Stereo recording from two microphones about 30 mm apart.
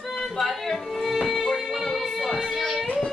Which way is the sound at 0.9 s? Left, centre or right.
Centre.